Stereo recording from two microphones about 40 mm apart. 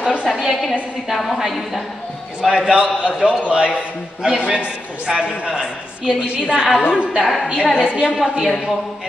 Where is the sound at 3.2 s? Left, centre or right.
Right.